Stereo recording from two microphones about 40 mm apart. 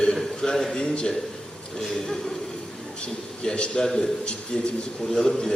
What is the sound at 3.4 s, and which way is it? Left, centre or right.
Speech, left.